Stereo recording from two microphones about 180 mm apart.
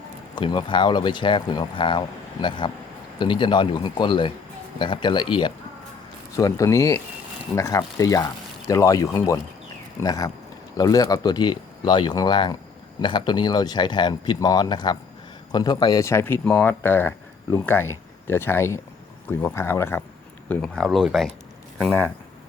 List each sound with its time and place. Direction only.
0.3 s speech: 25° left (ahead or behind)
20.5 s speech: 5° left (ahead or behind)